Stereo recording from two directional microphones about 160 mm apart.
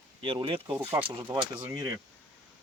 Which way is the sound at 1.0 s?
30° right (ahead or behind).